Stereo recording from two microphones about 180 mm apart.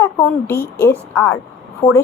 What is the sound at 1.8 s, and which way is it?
Speech, 30° left (ahead or behind).